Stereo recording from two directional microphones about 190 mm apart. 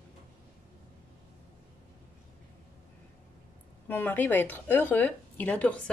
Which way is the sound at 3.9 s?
10° left (ahead or behind).